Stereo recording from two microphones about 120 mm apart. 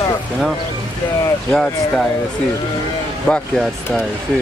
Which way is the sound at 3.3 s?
Centre (ahead or behind).